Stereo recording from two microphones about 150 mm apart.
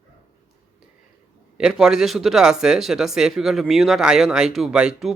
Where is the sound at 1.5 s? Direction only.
5° right (ahead or behind).